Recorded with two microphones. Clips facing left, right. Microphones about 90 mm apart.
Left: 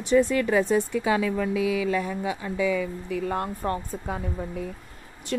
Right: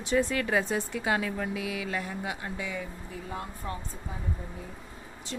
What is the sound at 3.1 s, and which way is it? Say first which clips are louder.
A woman's voice: left 10 dB; 75° left (ahead or behind).